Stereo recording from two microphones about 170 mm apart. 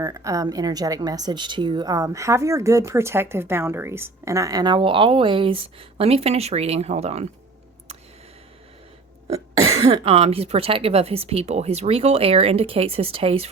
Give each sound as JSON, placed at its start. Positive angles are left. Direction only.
{"t": 0.0, "sound": "speech", "side_deg": -20}
{"t": 9.8, "sound": "speech", "side_deg": -35}